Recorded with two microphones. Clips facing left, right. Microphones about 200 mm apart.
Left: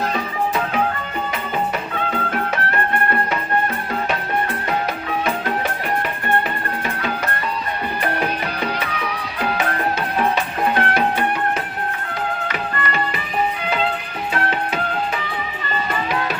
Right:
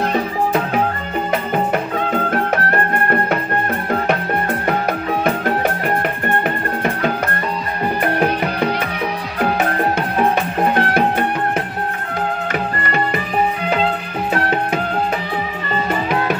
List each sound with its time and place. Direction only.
1.7 s music: 45° right (ahead or behind)
5.2 s music: 50° right (ahead or behind)
10.6 s music: 40° right (ahead or behind)